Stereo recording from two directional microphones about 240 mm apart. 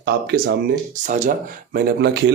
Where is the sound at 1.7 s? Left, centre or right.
Right.